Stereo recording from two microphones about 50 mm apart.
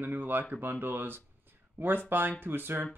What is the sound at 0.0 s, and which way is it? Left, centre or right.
Speech, right.